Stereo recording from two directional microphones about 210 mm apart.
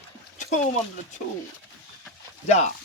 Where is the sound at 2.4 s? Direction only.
35° left (ahead or behind).